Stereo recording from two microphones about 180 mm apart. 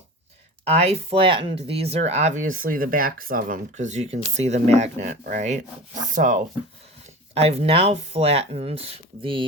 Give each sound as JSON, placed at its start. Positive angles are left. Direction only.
{"t": 0.6, "sound": "speech", "side_deg": -35}
{"t": 7.3, "sound": "speech", "side_deg": -35}